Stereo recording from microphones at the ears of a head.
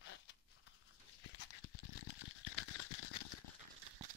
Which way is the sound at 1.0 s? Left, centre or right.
Left.